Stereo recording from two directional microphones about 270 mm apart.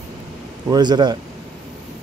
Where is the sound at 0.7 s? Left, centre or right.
Centre.